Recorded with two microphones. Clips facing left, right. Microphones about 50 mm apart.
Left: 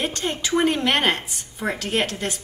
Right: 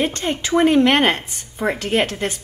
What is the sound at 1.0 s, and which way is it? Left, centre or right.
A woman's voice, centre.